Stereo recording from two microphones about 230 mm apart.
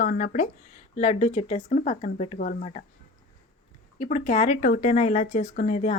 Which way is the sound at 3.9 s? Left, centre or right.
Left.